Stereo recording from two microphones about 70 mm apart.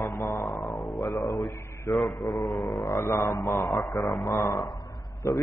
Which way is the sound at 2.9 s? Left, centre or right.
Left.